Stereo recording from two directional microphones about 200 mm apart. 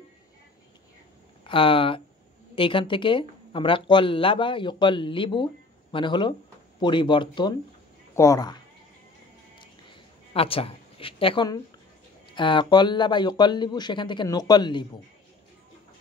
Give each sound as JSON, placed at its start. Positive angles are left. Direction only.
{"t": 1.4, "sound": "speech", "side_deg": 25}
{"t": 9.6, "sound": "a sound", "side_deg": 25}
{"t": 12.4, "sound": "speech", "side_deg": 25}